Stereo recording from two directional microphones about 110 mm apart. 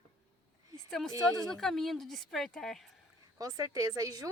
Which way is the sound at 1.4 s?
5° left (ahead or behind).